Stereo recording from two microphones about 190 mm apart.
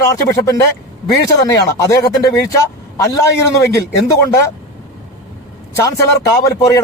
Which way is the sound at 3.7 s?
15° left (ahead or behind).